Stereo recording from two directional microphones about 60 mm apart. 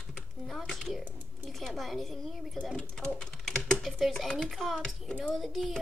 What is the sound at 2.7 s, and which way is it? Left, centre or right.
Speech, centre.